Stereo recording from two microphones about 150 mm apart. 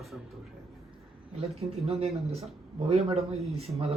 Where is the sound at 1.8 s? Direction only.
40° right (ahead or behind).